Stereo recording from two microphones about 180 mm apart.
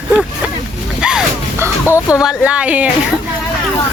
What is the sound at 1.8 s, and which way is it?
Speech, 15° left (ahead or behind).